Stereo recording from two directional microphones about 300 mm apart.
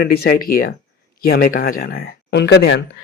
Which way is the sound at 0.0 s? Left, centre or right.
Left.